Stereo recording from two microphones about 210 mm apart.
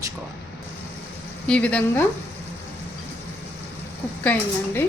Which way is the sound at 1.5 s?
5° left (ahead or behind).